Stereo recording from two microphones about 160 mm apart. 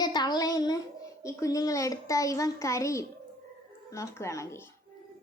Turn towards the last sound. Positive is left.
turn(degrees=15)  # may be behind; listen again after turning